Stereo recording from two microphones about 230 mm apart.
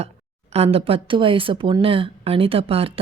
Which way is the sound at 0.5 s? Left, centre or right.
Right.